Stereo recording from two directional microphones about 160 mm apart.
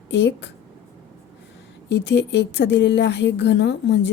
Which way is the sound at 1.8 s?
90° left.